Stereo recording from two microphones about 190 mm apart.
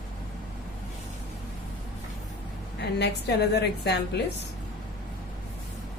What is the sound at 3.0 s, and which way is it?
A woman's voice, 60° left (ahead or behind).